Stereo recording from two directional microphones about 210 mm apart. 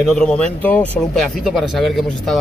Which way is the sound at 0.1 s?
5° left (ahead or behind).